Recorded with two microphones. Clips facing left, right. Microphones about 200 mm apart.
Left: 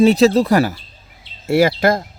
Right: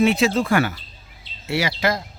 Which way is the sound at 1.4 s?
50° left (ahead or behind).